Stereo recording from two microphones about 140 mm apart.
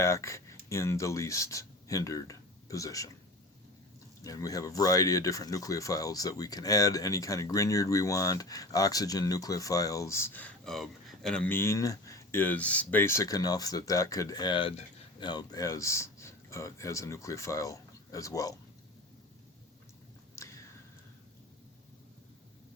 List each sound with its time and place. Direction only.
0.0 s speech: 20° left (ahead or behind)
4.2 s speech: 25° left (ahead or behind); by 11.4 s 5° left (ahead or behind)
11.4 s speech: 15° left (ahead or behind)
20.3 s a sound: 20° left (ahead or behind)